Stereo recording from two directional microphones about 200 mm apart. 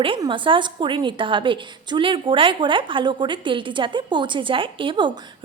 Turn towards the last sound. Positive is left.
turn(degrees=-25)  # may be behind; listen again after turning